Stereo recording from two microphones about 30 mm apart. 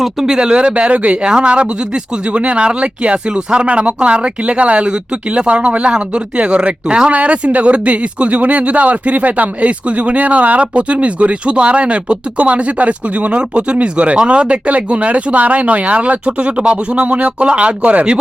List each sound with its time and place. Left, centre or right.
0.0 s speech: centre
0.3 s speech: right
1.3 s speech: right
3.7 s speech: right
4.9 s speech: right
7.1 s speech: right